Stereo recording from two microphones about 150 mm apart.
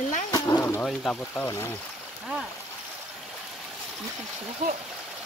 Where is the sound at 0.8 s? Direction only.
Centre (ahead or behind).